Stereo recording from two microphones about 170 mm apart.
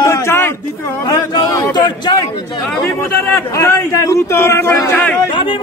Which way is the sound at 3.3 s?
20° left (ahead or behind).